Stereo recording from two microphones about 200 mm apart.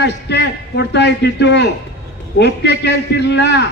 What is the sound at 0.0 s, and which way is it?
A man's voice, 60° left (ahead or behind).